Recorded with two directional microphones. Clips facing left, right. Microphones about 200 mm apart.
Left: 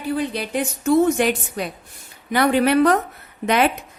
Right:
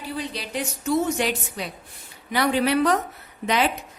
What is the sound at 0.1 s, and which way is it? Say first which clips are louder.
A woman's voice: left 7 dB; 55° left (ahead or behind).